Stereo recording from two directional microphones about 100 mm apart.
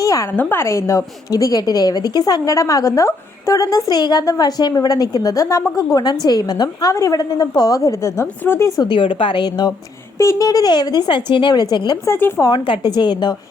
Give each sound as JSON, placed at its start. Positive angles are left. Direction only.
{"t": 0.0, "sound": "a sound", "side_deg": 35}
{"t": 0.3, "sound": "a woman's voice", "side_deg": 20}
{"t": 8.8, "sound": "a woman's voice", "side_deg": 55}
{"t": 10.2, "sound": "speech", "side_deg": 30}
{"t": 12.0, "sound": "speech", "side_deg": 25}
{"t": 12.5, "sound": "speech", "side_deg": 55}